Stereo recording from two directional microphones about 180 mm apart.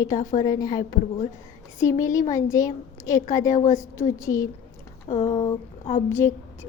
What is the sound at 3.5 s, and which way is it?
A woman's voice, 45° left (ahead or behind).